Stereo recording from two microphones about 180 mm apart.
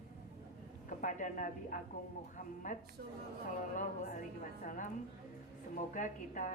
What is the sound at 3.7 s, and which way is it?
A woman's voice, 45° left (ahead or behind).